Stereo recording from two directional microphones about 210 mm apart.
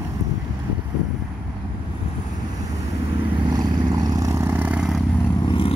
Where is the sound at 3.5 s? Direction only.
20° right (ahead or behind).